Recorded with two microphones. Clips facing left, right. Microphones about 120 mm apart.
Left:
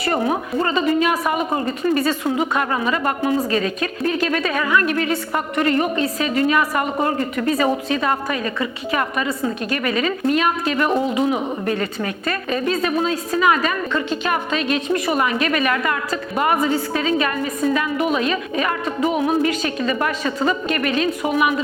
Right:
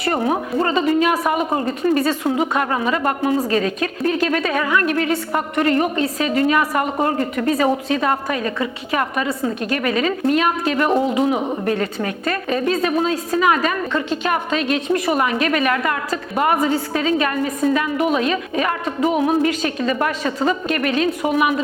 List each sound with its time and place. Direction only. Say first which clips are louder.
0.1 s speech: right 1 dB; 45° right (ahead or behind)